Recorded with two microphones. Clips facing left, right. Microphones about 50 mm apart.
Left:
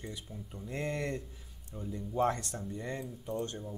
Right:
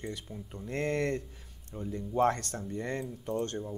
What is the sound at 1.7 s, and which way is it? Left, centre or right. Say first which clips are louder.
Speech: right 4 dB; right.